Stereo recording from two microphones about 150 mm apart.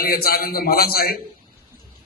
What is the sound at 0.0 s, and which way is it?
A man's voice, 90° left.